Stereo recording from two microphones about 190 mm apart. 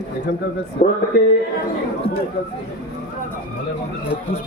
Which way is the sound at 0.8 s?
40° left (ahead or behind).